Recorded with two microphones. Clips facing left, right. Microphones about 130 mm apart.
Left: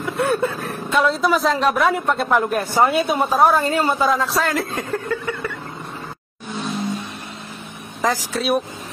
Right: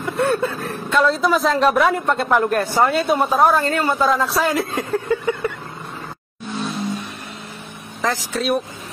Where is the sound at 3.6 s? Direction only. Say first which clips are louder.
Left 1 dB; 20° left (ahead or behind).